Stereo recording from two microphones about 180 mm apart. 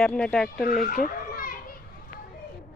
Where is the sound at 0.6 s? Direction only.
50° left (ahead or behind).